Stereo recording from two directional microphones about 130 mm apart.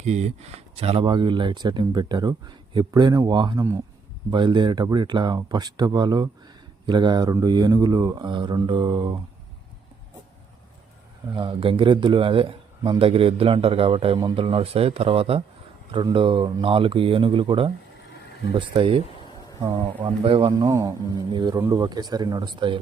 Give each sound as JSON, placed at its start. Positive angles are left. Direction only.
{"t": 0.0, "sound": "speech", "side_deg": -60}
{"t": 11.3, "sound": "a man's voice", "side_deg": -40}
{"t": 20.6, "sound": "speech", "side_deg": -25}